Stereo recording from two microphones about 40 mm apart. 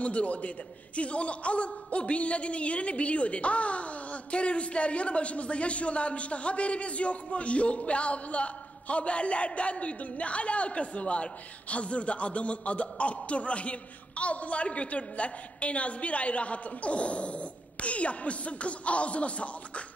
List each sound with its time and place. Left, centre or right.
0.0 s a man's voice: left